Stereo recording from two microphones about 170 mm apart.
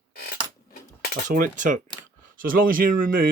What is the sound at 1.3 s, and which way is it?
Speech, 50° right (ahead or behind).